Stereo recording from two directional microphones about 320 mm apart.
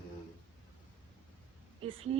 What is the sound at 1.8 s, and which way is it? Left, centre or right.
Speech, centre.